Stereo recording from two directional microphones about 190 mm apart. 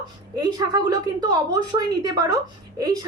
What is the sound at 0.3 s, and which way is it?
A woman's voice, 20° right (ahead or behind).